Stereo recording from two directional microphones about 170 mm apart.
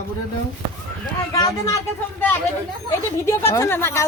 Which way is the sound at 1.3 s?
20° left (ahead or behind).